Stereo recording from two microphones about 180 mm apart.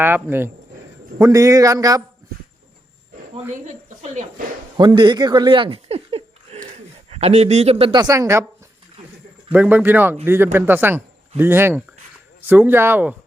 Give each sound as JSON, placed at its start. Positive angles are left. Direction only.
{"t": 0.0, "sound": "speech", "side_deg": -10}
{"t": 3.7, "sound": "speech", "side_deg": -40}
{"t": 4.8, "sound": "speech", "side_deg": -25}
{"t": 9.5, "sound": "speech", "side_deg": -10}